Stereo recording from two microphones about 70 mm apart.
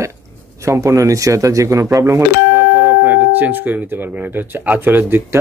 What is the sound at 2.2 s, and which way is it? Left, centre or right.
Speech, right.